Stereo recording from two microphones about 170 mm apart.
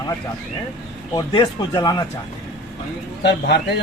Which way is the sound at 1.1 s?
25° left (ahead or behind).